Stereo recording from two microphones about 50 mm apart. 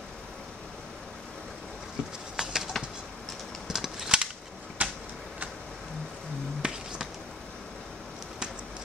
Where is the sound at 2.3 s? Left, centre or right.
Centre.